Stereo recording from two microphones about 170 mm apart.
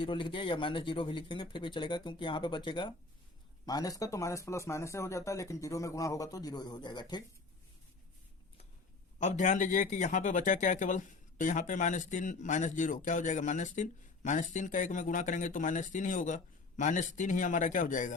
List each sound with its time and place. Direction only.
0.0 s speech: 30° left (ahead or behind)
9.1 s speech: 45° left (ahead or behind)